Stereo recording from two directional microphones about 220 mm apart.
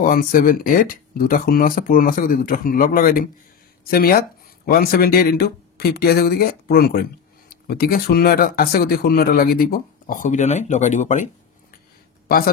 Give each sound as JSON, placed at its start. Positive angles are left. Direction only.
{"t": 0.0, "sound": "speech", "side_deg": 40}